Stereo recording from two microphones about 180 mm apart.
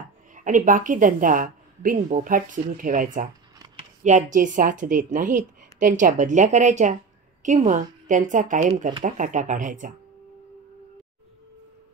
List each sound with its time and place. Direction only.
0.3 s a woman's voice: 45° right (ahead or behind)